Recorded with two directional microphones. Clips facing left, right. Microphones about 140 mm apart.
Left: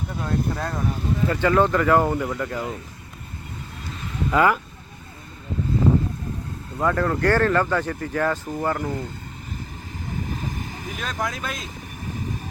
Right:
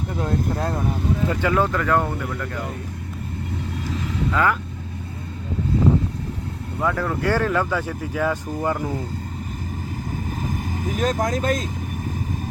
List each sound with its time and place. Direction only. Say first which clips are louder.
0.5 s speech: right 3 dB; 25° right (ahead or behind)
1.3 s speech: left 4 dB; 5° right (ahead or behind); by 2.6 s 10° left (ahead or behind)
4.3 s speech: left 3 dB; 10° left (ahead or behind)
6.7 s speech: left 2 dB; centre (ahead or behind)
10.4 s speech: right 5 dB; 45° right (ahead or behind)